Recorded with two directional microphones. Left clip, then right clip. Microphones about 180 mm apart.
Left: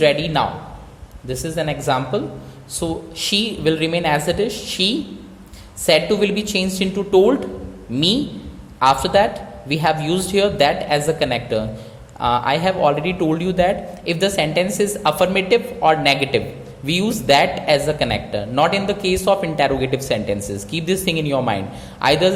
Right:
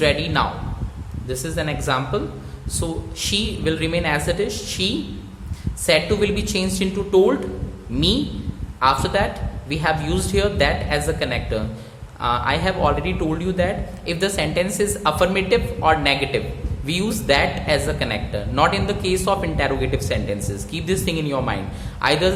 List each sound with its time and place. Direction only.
0.0 s a man's voice: 15° left (ahead or behind)